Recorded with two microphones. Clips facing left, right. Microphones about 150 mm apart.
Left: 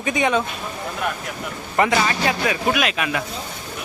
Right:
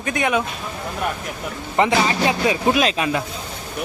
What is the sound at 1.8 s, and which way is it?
Speech, 20° right (ahead or behind).